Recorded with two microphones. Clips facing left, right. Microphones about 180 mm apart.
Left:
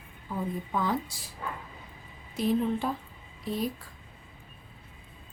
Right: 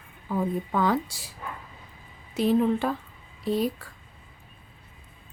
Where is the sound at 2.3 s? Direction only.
75° right (ahead or behind).